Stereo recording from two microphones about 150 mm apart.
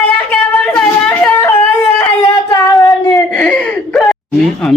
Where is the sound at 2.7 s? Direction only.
5° left (ahead or behind).